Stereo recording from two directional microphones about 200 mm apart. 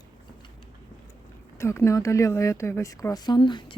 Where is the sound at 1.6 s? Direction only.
15° left (ahead or behind).